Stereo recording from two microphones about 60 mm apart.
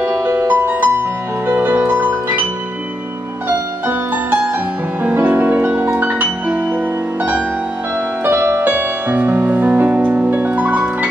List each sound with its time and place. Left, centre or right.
0.0 s music: right
3.4 s music: right
8.2 s music: right
8.6 s music: right